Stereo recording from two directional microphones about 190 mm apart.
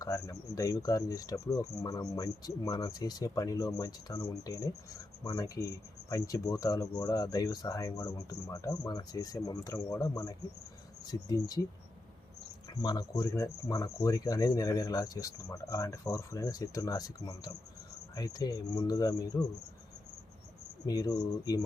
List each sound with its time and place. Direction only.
0.0 s speech: 15° left (ahead or behind)
12.6 s speech: 20° left (ahead or behind)
20.8 s speech: 20° left (ahead or behind)